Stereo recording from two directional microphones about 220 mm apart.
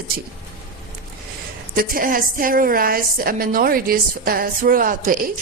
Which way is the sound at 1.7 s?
40° right (ahead or behind).